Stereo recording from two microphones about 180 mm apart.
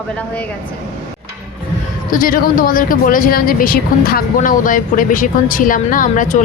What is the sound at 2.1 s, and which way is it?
Speech, 50° left (ahead or behind).